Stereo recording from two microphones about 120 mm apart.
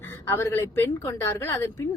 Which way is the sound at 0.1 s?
20° left (ahead or behind).